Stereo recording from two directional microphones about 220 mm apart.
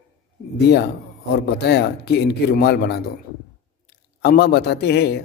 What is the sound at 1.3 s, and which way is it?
A man's voice, 50° left (ahead or behind).